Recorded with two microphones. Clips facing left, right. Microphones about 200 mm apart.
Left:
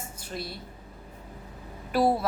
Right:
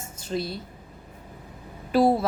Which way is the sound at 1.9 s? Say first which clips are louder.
Right 4 dB; 25° right (ahead or behind).